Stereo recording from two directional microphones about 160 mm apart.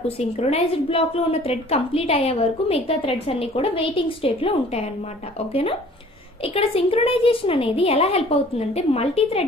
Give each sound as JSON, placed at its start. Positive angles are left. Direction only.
{"t": 0.4, "sound": "a woman's voice", "side_deg": 35}